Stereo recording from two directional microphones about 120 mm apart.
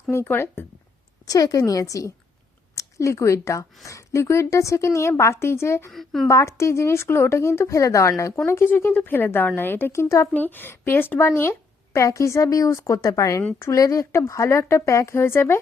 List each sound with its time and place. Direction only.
0.1 s a woman's voice: 20° left (ahead or behind)
1.2 s a woman's voice: 30° left (ahead or behind)
5.9 s speech: centre (ahead or behind)
6.2 s a woman's voice: 25° left (ahead or behind)